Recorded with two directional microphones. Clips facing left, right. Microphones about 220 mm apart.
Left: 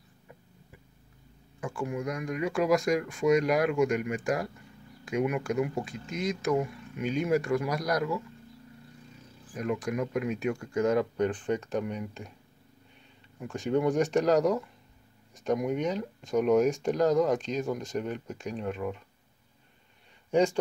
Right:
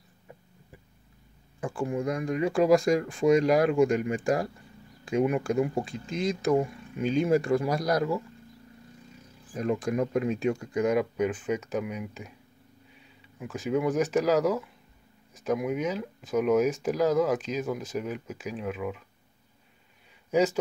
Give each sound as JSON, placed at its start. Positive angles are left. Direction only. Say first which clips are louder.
{"t": 1.6, "sound": "speech", "louder": "right 3 dB", "side_deg": -30}
{"t": 9.5, "sound": "speech", "louder": "right 3 dB", "side_deg": -30}
{"t": 13.4, "sound": "speech", "louder": "even", "side_deg": -5}
{"t": 20.2, "sound": "speech", "louder": "even", "side_deg": -5}